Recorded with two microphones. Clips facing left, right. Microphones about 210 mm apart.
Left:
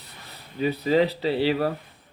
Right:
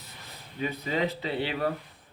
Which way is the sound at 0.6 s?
35° left (ahead or behind).